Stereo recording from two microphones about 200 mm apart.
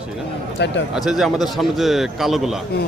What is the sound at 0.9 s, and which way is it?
A man's voice, centre (ahead or behind).